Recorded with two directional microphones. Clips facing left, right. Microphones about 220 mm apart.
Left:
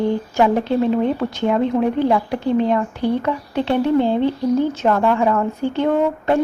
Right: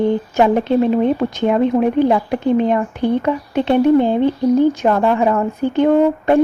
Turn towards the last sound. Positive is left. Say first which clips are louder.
# right 5 dB
turn(degrees=-15)  # may be behind; listen again after turning